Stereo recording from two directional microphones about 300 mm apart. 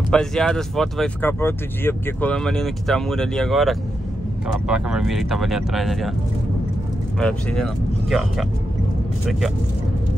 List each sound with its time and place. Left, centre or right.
0.1 s speech: centre
7.2 s speech: centre